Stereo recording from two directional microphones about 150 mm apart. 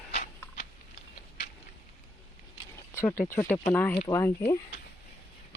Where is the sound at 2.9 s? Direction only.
15° left (ahead or behind).